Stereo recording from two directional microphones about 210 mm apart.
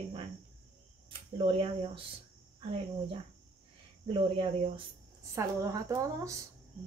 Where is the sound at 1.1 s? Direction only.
25° right (ahead or behind).